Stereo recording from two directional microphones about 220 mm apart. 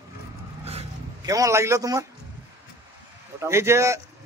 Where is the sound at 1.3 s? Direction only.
15° right (ahead or behind).